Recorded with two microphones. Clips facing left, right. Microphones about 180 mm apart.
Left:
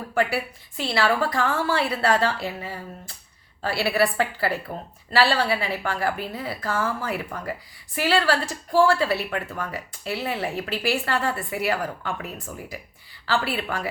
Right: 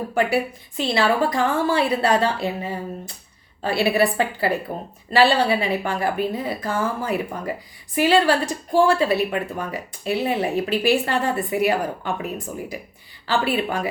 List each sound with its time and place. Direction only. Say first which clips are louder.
0.1 s a woman's voice: right 2 dB; 20° right (ahead or behind)